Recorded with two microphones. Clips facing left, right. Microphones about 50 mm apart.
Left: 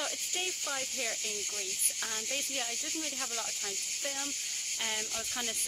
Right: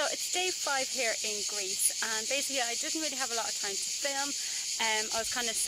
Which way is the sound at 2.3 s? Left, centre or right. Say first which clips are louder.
Right 4 dB; right.